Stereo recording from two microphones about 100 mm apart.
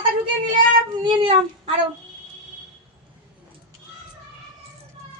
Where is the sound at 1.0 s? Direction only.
60° right (ahead or behind).